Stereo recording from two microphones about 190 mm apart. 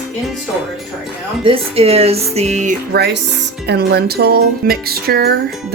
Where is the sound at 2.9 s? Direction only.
60° right (ahead or behind).